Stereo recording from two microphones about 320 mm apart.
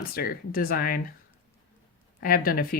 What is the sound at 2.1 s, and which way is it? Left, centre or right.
Speech, left.